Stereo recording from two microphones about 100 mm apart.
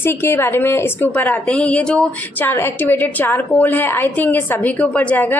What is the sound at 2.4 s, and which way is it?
A woman's voice, 20° left (ahead or behind).